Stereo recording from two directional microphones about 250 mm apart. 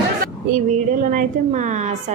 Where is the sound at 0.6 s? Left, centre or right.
Right.